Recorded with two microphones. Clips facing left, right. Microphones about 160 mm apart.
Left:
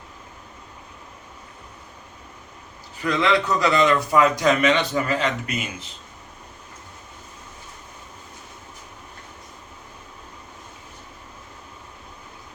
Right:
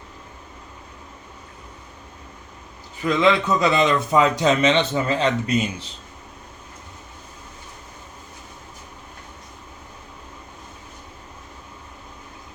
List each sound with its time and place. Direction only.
3.0 s a man's voice: 20° right (ahead or behind)